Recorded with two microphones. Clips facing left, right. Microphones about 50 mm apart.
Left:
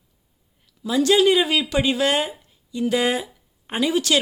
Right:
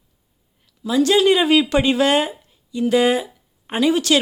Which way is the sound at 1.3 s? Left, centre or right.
Centre.